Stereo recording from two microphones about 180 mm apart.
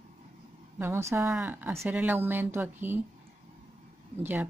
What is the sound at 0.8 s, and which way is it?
Speech, 15° right (ahead or behind).